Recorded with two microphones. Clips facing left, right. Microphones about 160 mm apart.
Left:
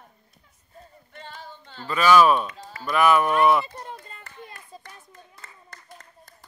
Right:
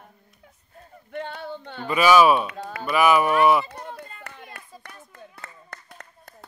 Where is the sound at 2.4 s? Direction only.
60° right (ahead or behind).